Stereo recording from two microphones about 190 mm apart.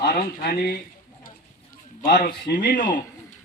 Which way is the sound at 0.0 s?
55° left (ahead or behind).